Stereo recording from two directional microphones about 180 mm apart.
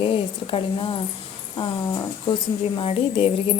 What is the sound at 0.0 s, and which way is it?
A woman's voice, 30° left (ahead or behind).